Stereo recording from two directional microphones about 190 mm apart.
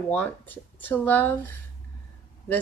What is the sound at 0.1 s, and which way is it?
Speech, 10° left (ahead or behind).